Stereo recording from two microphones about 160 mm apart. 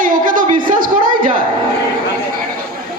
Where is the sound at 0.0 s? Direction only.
55° right (ahead or behind).